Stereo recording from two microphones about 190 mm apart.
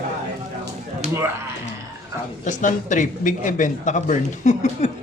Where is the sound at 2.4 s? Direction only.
40° left (ahead or behind).